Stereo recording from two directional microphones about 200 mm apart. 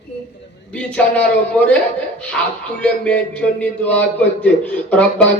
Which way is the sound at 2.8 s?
5° left (ahead or behind).